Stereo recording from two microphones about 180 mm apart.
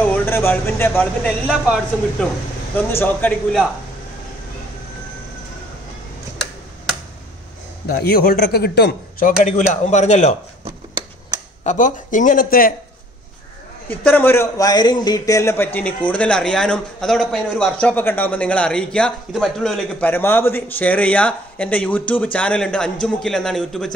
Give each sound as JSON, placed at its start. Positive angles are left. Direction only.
{"t": 0.0, "sound": "speech", "side_deg": 10}
{"t": 1.5, "sound": "a man's voice", "side_deg": -5}
{"t": 2.9, "sound": "a man's voice", "side_deg": 10}
{"t": 7.9, "sound": "a man's voice", "side_deg": 60}
{"t": 9.2, "sound": "speech", "side_deg": 45}
{"t": 10.6, "sound": "a sound", "side_deg": -25}
{"t": 11.6, "sound": "speech", "side_deg": 45}
{"t": 13.8, "sound": "a man's voice", "side_deg": 10}